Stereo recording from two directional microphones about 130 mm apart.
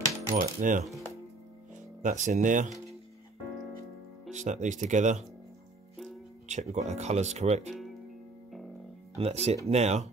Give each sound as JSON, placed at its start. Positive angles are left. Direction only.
{"t": 0.3, "sound": "coin", "side_deg": -90}
{"t": 2.0, "sound": "speech", "side_deg": -75}
{"t": 4.3, "sound": "speech", "side_deg": -70}
{"t": 6.5, "sound": "speech", "side_deg": -60}
{"t": 9.1, "sound": "speech", "side_deg": -55}